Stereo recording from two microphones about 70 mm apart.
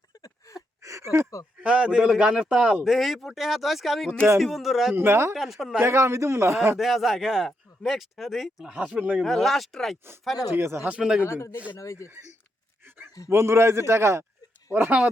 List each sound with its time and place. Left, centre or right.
0.2 s gasp: left
0.8 s a sound: right
1.6 s a man's voice: centre
4.9 s a man's voice: right
5.3 s speech: centre
5.8 s a man's voice: right
6.7 s speech: centre
8.7 s speech: centre
9.2 s speech: centre
10.5 s a man's voice: right
10.8 s a man's voice: centre
11.2 s a man's voice: left
13.3 s a man's voice: right
14.7 s speech: right